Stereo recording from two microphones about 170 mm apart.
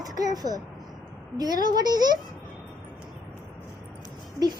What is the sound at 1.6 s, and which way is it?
Child singing, 25° right (ahead or behind).